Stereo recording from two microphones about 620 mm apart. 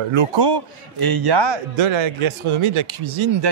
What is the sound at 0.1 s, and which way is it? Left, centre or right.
A man's voice, right.